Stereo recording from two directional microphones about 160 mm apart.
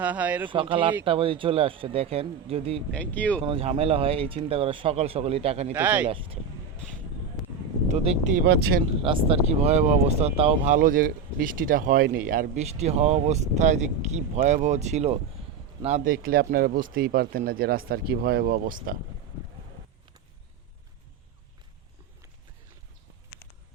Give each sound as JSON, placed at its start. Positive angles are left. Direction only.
{"t": 0.0, "sound": "speech", "side_deg": -10}
{"t": 0.4, "sound": "speech", "side_deg": -30}
{"t": 2.9, "sound": "speech", "side_deg": 10}
{"t": 3.4, "sound": "speech", "side_deg": -35}
{"t": 5.7, "sound": "speech", "side_deg": -10}
{"t": 6.1, "sound": "speech", "side_deg": -35}
{"t": 7.9, "sound": "speech", "side_deg": -45}
{"t": 8.4, "sound": "speech", "side_deg": -90}
{"t": 9.0, "sound": "speech", "side_deg": -35}
{"t": 12.5, "sound": "speech", "side_deg": -45}
{"t": 16.0, "sound": "speech", "side_deg": -65}